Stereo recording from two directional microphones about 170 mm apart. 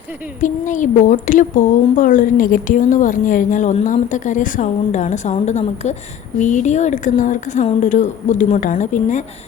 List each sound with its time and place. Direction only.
0.3 s a woman's voice: 50° left (ahead or behind)